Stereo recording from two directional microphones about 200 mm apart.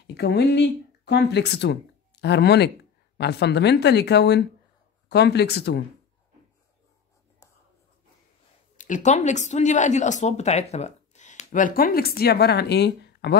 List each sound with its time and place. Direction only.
0.0 s speech: 55° left (ahead or behind)
8.7 s speech: 40° left (ahead or behind); by 13.4 s 55° left (ahead or behind)